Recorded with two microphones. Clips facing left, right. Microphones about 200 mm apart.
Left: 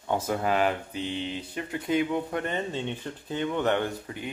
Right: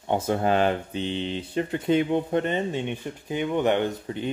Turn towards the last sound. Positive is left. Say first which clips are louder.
# right 5 dB
turn(degrees=-25)  # may be behind; listen again after turning